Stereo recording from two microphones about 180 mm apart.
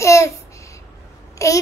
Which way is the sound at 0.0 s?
15° left (ahead or behind).